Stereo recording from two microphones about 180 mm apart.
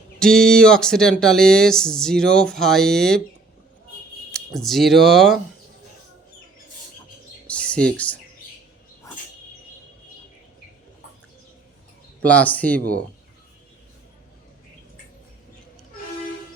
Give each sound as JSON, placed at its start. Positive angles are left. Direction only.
{"t": 0.2, "sound": "speech", "side_deg": 5}
{"t": 4.3, "sound": "speech", "side_deg": 0}
{"t": 7.4, "sound": "bird", "side_deg": 5}
{"t": 7.9, "sound": "speech", "side_deg": 5}
{"t": 12.2, "sound": "speech", "side_deg": 10}